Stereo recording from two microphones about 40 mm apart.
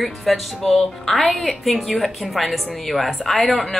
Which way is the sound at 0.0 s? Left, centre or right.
Centre.